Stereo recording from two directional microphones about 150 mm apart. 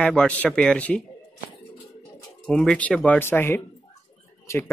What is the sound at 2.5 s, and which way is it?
Speech, 5° left (ahead or behind).